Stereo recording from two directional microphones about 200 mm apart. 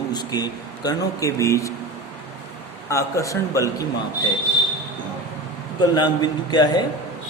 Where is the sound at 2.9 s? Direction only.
15° left (ahead or behind).